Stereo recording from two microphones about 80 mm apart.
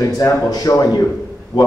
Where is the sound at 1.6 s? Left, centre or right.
Left.